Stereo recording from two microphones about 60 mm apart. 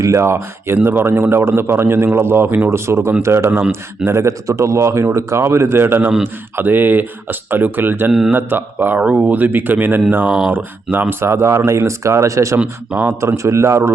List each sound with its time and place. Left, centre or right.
0.0 s a man's voice: right
9.0 s speech: right
11.2 s a man's voice: right
12.5 s speech: right
13.2 s speech: right